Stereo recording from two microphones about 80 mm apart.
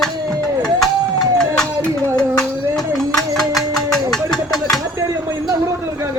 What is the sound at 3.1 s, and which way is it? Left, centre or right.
Music, centre.